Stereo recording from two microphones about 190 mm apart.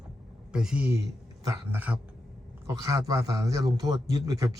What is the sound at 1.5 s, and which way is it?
A man's voice, 10° right (ahead or behind).